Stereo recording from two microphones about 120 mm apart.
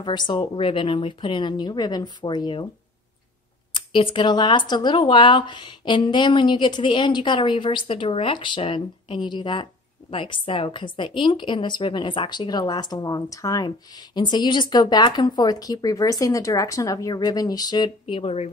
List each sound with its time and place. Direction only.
0.0 s a woman's voice: 40° left (ahead or behind)
3.7 s a woman's voice: 45° left (ahead or behind)
18.0 s speech: 50° left (ahead or behind)